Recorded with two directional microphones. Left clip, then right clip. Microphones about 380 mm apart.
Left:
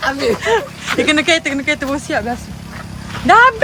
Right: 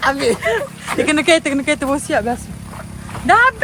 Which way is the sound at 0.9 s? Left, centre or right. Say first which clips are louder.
Even; centre.